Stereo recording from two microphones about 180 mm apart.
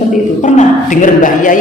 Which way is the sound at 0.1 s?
45° left (ahead or behind).